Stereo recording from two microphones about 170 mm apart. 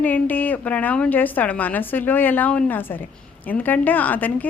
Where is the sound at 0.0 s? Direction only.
10° left (ahead or behind).